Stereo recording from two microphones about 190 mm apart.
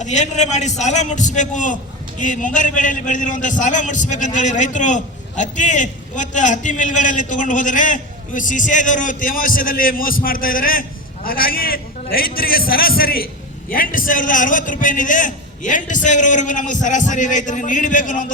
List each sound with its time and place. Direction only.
0.0 s a man's voice: 40° left (ahead or behind)